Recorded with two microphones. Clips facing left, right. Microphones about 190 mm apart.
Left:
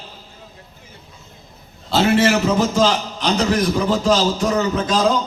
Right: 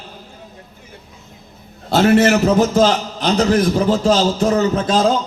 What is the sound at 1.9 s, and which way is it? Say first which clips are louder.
A man's voice: right 3 dB; 45° right (ahead or behind).